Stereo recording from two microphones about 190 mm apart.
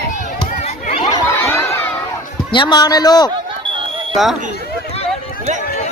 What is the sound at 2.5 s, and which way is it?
Speech, 25° left (ahead or behind).